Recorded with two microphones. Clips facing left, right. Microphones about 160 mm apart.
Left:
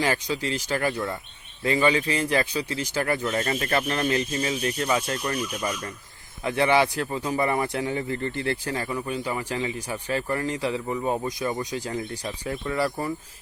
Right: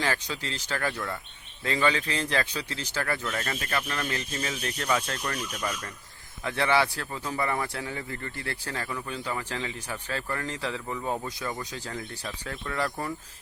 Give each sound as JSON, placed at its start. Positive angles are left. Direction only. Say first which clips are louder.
{"t": 0.0, "sound": "speech", "louder": "left 5 dB", "side_deg": 15}
{"t": 3.2, "sound": "speech", "louder": "left 6 dB", "side_deg": 30}